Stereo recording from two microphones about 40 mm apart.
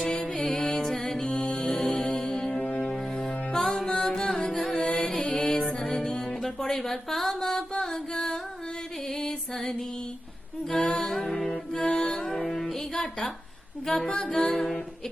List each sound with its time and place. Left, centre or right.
0.3 s music: centre
1.0 s music: centre
1.7 s music: centre
3.8 s carnatic music: centre
4.7 s music: centre
10.8 s music: left
11.1 s music: centre
12.2 s music: centre
12.9 s a sound: centre
13.8 s music: centre